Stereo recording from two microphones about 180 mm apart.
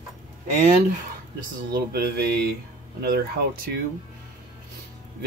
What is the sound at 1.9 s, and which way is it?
Speech, 60° right (ahead or behind).